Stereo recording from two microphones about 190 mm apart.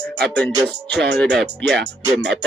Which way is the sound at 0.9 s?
65° right (ahead or behind).